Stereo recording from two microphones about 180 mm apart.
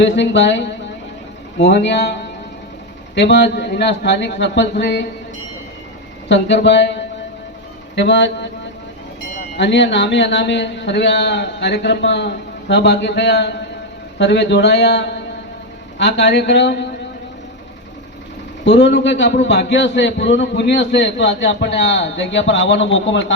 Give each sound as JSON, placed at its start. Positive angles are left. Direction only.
{"t": 0.0, "sound": "a man's voice", "side_deg": 80}
{"t": 3.2, "sound": "a man's voice", "side_deg": 75}
{"t": 6.2, "sound": "a man's voice", "side_deg": 75}
{"t": 7.9, "sound": "a man's voice", "side_deg": 80}
{"t": 9.6, "sound": "a man's voice", "side_deg": 80}
{"t": 18.6, "sound": "a man's voice", "side_deg": 80}